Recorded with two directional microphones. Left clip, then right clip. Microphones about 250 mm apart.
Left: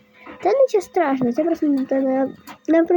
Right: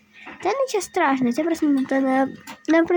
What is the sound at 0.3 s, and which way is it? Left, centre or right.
Speech, centre.